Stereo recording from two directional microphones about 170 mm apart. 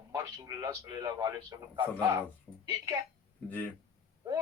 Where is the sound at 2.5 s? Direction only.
5° left (ahead or behind).